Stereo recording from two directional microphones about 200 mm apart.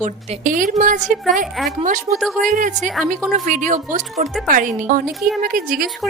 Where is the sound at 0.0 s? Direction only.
40° right (ahead or behind).